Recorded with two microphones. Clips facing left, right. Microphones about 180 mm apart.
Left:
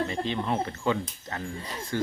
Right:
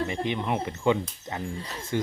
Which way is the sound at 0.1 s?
15° right (ahead or behind).